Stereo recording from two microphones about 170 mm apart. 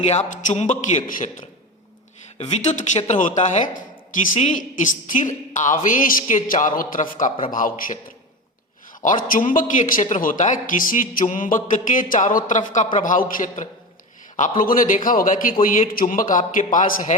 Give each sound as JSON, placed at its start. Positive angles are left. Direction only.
{"t": 0.1, "sound": "speech", "side_deg": 45}
{"t": 9.0, "sound": "speech", "side_deg": 50}